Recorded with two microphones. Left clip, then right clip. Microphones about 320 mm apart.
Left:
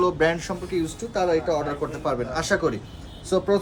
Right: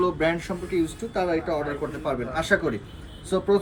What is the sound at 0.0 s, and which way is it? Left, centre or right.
Speech, centre.